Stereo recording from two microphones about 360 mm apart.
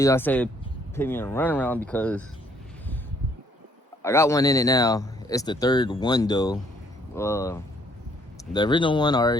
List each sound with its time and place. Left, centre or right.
0.0 s speech: centre
4.0 s speech: centre